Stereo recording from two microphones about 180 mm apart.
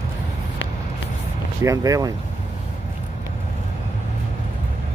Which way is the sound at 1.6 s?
20° right (ahead or behind).